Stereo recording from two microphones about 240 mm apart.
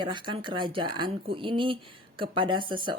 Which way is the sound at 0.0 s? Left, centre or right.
Centre.